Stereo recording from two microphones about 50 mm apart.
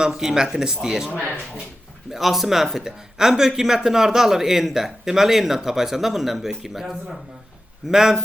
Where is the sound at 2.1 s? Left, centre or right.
Centre.